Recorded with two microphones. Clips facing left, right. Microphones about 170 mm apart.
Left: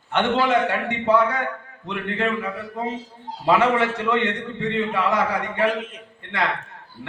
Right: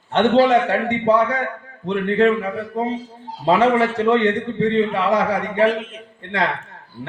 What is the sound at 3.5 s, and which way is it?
Speech, 35° right (ahead or behind).